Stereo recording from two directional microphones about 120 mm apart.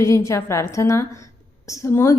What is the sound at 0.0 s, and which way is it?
A woman's voice, 25° left (ahead or behind).